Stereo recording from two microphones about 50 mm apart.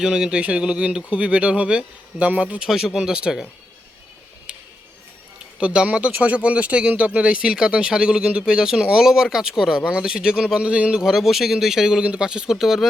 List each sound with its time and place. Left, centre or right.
0.0 s speech: centre; by 2.6 s right
2.6 s speech: centre
5.5 s speech: right
6.1 s speech: right
11.0 s speech: centre